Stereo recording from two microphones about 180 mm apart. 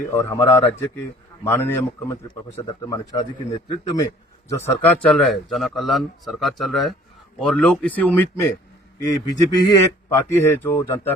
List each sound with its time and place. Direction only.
0.1 s a man's voice: 15° left (ahead or behind)